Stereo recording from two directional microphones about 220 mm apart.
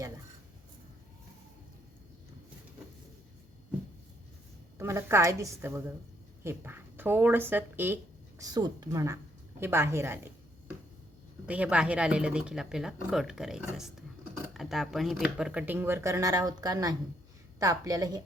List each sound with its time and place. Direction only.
4.8 s speech: 10° right (ahead or behind)
11.4 s speech: 5° right (ahead or behind)